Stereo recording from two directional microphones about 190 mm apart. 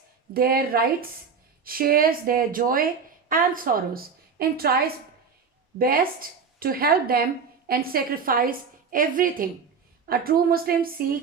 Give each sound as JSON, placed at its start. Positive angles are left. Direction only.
{"t": 0.3, "sound": "a woman's voice", "side_deg": -50}
{"t": 5.8, "sound": "a woman's voice", "side_deg": -50}